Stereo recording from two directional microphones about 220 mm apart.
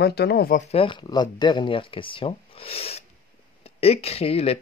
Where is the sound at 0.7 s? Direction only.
25° left (ahead or behind).